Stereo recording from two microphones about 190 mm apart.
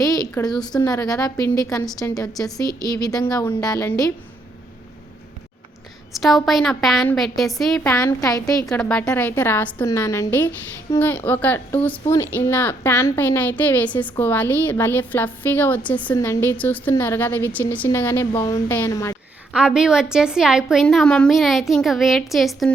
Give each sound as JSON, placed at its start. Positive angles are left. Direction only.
{"t": 0.0, "sound": "a sound", "side_deg": 20}
{"t": 0.7, "sound": "a woman's voice", "side_deg": 20}
{"t": 6.1, "sound": "a woman's voice", "side_deg": 0}
{"t": 8.0, "sound": "a woman's voice", "side_deg": 20}
{"t": 8.7, "sound": "a woman's voice", "side_deg": 5}
{"t": 19.5, "sound": "a woman's voice", "side_deg": -5}